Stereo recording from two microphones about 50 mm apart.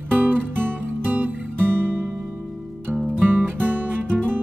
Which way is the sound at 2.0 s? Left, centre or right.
Centre.